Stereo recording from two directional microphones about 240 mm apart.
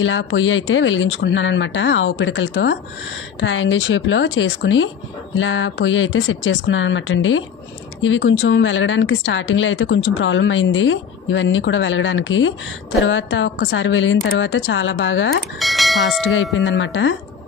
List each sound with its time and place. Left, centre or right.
0.0 s speech: left
15.6 s speech: centre
16.5 s speech: left